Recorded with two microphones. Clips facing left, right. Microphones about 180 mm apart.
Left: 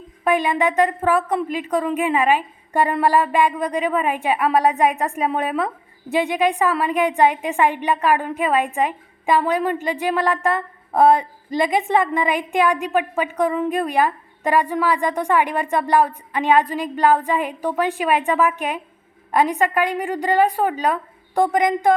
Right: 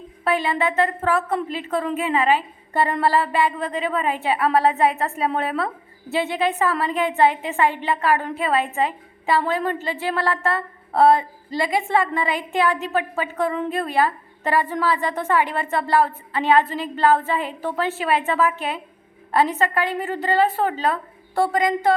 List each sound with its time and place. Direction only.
0.3 s a woman's voice: 15° left (ahead or behind)